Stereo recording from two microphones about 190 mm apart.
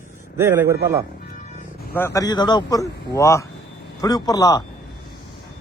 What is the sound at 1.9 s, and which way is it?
Speech, 15° left (ahead or behind).